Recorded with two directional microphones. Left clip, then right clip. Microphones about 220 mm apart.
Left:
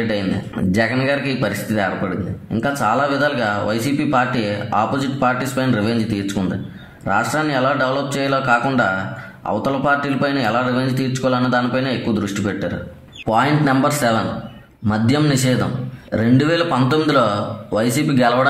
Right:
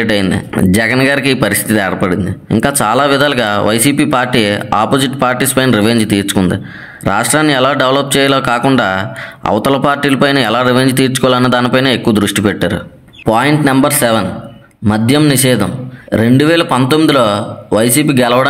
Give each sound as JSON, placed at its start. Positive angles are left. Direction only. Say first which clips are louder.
{"t": 0.1, "sound": "speech", "louder": "right 8 dB", "side_deg": -35}